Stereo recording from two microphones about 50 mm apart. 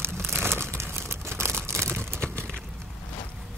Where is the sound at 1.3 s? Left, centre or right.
Right.